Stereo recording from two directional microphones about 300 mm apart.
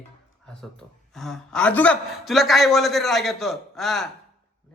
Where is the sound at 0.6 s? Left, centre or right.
Centre.